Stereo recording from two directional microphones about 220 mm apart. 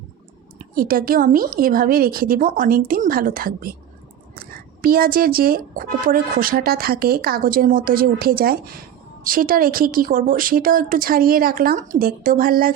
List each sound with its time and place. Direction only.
0.8 s speech: 40° right (ahead or behind)